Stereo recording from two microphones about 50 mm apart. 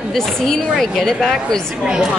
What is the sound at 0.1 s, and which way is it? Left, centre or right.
Speech, centre.